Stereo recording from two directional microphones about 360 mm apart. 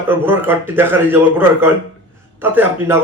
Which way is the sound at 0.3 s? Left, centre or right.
Centre.